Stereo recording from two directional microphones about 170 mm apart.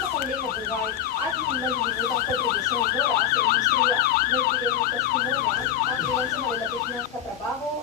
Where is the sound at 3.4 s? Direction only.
65° left (ahead or behind).